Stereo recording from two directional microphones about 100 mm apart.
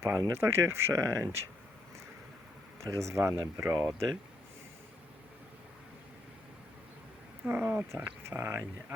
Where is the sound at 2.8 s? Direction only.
30° right (ahead or behind).